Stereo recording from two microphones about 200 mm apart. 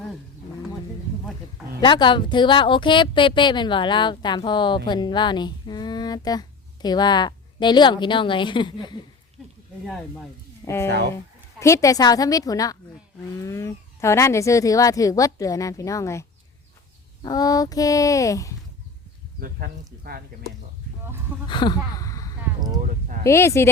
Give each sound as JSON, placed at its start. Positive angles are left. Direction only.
{"t": 1.8, "sound": "a woman's voice", "side_deg": 25}
{"t": 9.8, "sound": "speech", "side_deg": 5}
{"t": 10.8, "sound": "speech", "side_deg": -55}
{"t": 11.6, "sound": "speech", "side_deg": 15}
{"t": 17.2, "sound": "speech", "side_deg": 20}
{"t": 19.4, "sound": "speech", "side_deg": -45}
{"t": 21.4, "sound": "speech", "side_deg": 25}
{"t": 21.9, "sound": "a sound", "side_deg": 15}
{"t": 22.8, "sound": "a sound", "side_deg": -40}
{"t": 23.2, "sound": "speech", "side_deg": 15}